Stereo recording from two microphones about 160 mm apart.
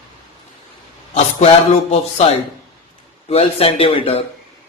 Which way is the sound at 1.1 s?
45° left (ahead or behind).